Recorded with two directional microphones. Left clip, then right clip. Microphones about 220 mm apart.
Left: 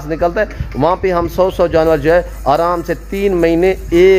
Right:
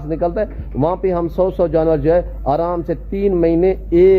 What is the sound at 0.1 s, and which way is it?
Speech, 10° left (ahead or behind).